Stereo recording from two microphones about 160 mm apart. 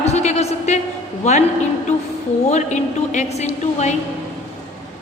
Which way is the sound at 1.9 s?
45° left (ahead or behind).